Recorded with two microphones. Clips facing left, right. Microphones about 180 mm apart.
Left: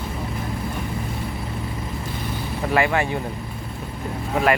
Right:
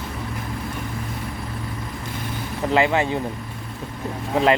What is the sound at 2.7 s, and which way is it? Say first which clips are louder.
Speech: right 2 dB; 20° right (ahead or behind).